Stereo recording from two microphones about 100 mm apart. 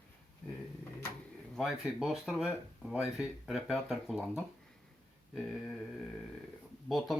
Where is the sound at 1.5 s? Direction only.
Centre (ahead or behind).